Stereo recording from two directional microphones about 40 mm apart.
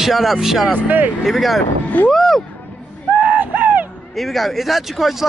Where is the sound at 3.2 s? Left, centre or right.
Right.